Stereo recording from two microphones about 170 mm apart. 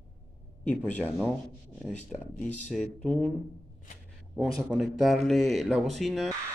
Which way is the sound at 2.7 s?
5° left (ahead or behind).